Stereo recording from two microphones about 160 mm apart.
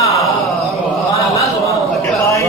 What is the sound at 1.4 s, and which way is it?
A man's voice, 20° left (ahead or behind).